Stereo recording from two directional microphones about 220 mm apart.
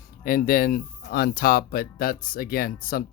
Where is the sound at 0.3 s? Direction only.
40° left (ahead or behind).